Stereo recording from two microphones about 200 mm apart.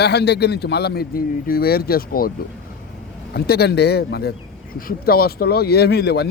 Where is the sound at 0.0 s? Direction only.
55° left (ahead or behind).